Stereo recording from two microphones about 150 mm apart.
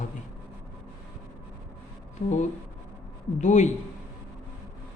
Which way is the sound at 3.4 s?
55° left (ahead or behind).